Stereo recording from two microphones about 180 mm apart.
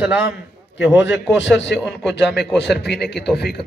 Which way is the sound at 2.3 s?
70° left (ahead or behind).